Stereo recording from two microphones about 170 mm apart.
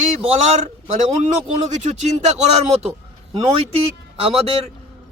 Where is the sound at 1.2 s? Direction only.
45° right (ahead or behind).